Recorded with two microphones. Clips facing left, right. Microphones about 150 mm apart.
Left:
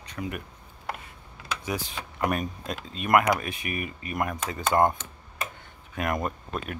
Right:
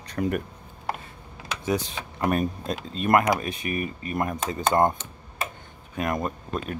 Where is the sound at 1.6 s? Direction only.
30° right (ahead or behind).